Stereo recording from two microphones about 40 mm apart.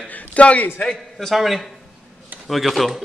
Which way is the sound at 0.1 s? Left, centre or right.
Left.